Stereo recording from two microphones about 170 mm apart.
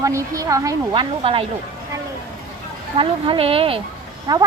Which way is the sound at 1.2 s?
35° right (ahead or behind).